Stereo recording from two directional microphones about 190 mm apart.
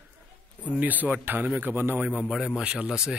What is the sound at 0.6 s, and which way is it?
A man's voice, 10° right (ahead or behind).